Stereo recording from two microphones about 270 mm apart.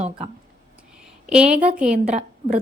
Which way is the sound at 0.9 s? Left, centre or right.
Centre.